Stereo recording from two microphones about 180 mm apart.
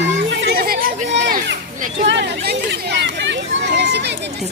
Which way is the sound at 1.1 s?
80° right.